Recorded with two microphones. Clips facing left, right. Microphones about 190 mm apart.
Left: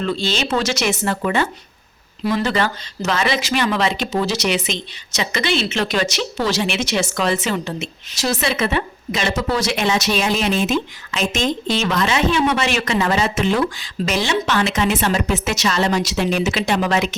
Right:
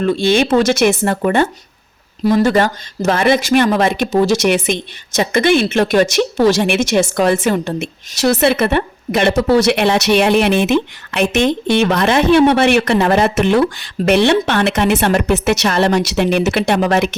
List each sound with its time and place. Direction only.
0.0 s speech: 50° right (ahead or behind)